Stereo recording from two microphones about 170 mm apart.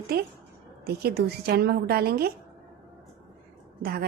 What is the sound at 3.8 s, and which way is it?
Speech, 65° right (ahead or behind).